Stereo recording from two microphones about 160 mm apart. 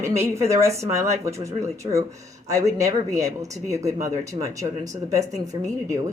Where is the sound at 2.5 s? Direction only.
20° right (ahead or behind).